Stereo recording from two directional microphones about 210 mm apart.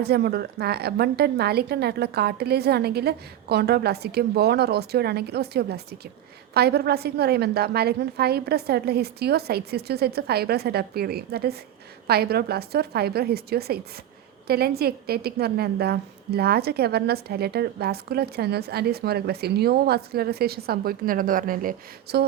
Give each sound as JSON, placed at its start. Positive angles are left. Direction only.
{"t": 0.0, "sound": "a woman's voice", "side_deg": -50}